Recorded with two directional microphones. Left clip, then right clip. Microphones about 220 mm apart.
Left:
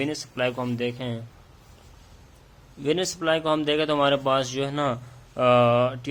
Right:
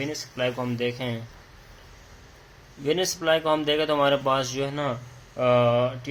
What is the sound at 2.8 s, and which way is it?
A man's voice, 15° left (ahead or behind).